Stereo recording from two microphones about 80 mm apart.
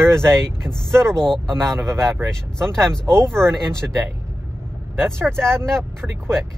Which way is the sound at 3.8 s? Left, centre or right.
Centre.